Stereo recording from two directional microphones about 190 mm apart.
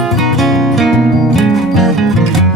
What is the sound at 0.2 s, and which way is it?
Music, centre (ahead or behind).